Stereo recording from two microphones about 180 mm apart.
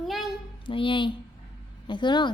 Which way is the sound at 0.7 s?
30° left (ahead or behind).